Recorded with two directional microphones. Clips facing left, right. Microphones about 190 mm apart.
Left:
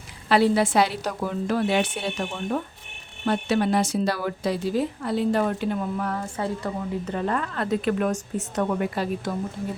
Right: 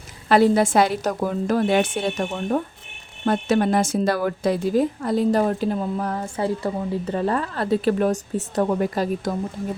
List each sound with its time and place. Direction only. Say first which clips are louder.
0.3 s a woman's voice: right 3 dB; 45° right (ahead or behind)